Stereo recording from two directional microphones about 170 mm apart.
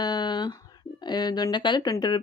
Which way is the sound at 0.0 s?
25° left (ahead or behind).